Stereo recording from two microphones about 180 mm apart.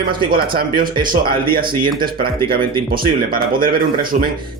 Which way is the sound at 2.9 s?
55° right (ahead or behind).